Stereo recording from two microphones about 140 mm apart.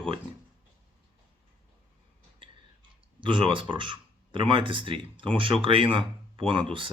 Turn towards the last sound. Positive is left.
turn(degrees=-40)  # may be behind; listen again after turning